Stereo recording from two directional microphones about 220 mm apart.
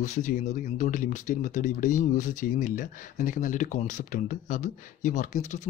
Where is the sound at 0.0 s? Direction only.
35° left (ahead or behind).